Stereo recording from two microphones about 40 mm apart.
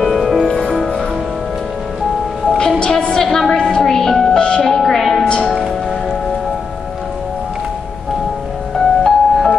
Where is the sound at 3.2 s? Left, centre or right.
Centre.